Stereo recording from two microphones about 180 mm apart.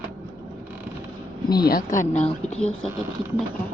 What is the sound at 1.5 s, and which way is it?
Speech, 25° left (ahead or behind).